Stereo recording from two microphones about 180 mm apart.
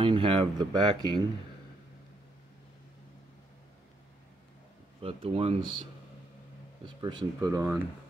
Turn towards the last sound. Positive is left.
turn(degrees=-15)  # may be behind; listen again after turning